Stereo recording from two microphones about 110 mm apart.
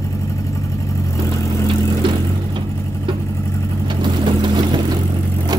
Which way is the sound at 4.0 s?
40° right (ahead or behind).